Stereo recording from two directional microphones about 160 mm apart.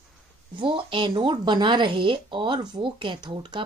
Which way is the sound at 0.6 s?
30° right (ahead or behind).